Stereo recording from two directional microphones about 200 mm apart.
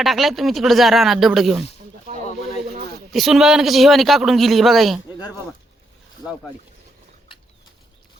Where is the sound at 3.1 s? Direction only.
Centre (ahead or behind).